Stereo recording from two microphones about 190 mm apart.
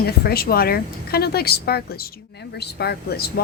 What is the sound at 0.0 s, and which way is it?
A woman's voice, 55° left (ahead or behind).